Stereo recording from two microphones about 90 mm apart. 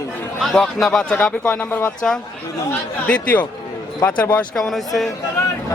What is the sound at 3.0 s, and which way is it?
A man's voice, 15° left (ahead or behind).